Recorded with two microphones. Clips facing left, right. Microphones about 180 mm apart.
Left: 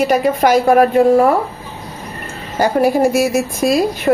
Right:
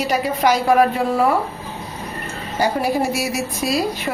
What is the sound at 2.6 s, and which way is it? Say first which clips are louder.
A woman's voice: left 6 dB; 50° left (ahead or behind).